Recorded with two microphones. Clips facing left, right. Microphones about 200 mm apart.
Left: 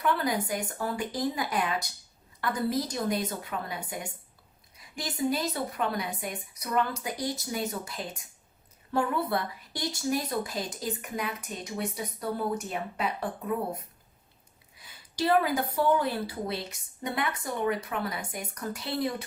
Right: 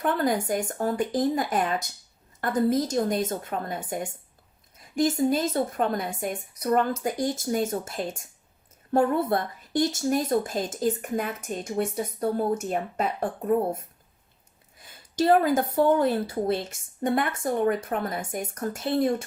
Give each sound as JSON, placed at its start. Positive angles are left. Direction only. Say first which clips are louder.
{"t": 0.0, "sound": "speech", "louder": "right 3 dB", "side_deg": -45}
{"t": 15.2, "sound": "speech", "louder": "right 5 dB", "side_deg": -45}